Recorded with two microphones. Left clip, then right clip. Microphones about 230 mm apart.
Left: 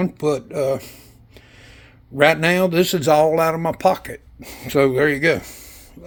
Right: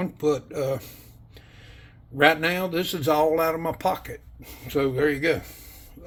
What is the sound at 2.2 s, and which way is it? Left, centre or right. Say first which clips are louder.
Speech: left 5 dB; left.